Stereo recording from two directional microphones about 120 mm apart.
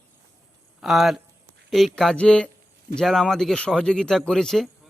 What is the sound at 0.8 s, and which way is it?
Speech, centre (ahead or behind).